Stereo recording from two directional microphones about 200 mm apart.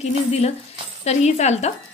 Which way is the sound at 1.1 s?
35° left (ahead or behind).